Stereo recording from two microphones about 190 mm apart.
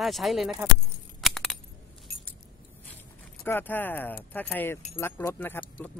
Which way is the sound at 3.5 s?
10° left (ahead or behind).